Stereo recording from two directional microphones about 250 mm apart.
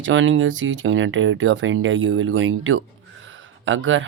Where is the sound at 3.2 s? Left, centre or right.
Right.